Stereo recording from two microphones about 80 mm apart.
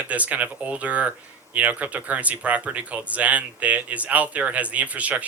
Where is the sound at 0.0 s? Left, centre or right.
Centre.